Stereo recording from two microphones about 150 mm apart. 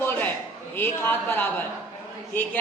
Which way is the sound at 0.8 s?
15° left (ahead or behind).